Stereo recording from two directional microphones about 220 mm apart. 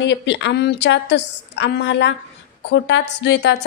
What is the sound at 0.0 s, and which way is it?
A woman's voice, 55° left (ahead or behind).